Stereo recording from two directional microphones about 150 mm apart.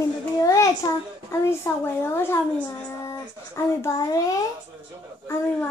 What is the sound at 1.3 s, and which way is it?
A woman's voice, 15° left (ahead or behind).